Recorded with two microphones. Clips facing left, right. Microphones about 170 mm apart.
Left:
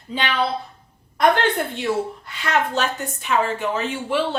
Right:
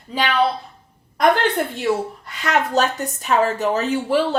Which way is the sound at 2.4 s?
40° right (ahead or behind).